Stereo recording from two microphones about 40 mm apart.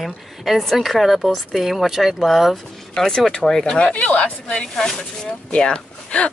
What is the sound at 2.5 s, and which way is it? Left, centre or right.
Speech, centre.